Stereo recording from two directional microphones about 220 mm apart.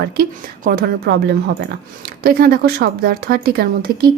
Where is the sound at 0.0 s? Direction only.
45° right (ahead or behind).